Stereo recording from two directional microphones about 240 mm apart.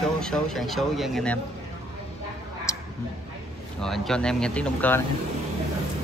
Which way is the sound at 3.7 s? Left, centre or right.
Centre.